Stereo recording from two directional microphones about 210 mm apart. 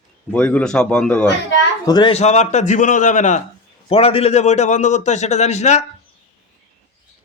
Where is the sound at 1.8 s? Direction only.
20° left (ahead or behind).